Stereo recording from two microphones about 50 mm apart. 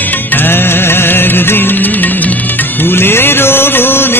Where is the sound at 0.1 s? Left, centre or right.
Left.